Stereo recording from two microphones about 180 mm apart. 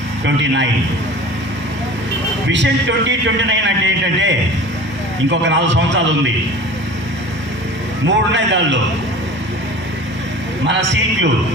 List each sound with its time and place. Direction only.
0.3 s a man's voice: 80° right
3.1 s speech: 90° right
5.3 s a man's voice: 85° right
8.0 s a man's voice: 90° right
10.7 s a man's voice: 85° right